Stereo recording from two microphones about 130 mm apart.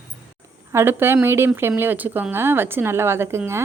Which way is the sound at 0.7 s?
15° right (ahead or behind).